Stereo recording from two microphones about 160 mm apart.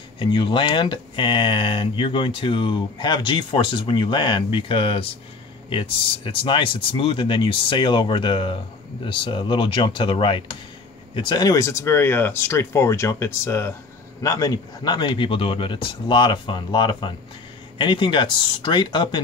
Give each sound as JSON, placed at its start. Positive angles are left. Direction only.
{"t": 0.2, "sound": "speech", "side_deg": 30}